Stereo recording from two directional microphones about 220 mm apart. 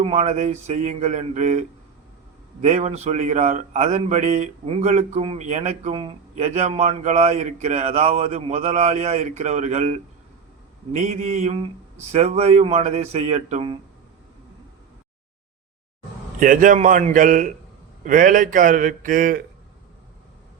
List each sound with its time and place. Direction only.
0.0 s a man's voice: 30° right (ahead or behind)
16.4 s a man's voice: 35° right (ahead or behind)